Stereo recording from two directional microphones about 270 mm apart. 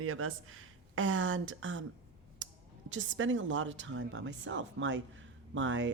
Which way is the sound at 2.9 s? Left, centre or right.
Right.